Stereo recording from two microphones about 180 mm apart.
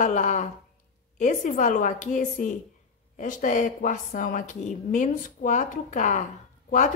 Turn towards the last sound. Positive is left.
turn(degrees=45)  # may be behind; listen again after turning